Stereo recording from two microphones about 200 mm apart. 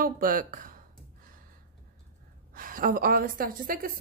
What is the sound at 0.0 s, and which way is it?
Speech, 45° right (ahead or behind).